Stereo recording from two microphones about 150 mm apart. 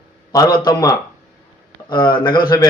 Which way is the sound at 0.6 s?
25° left (ahead or behind).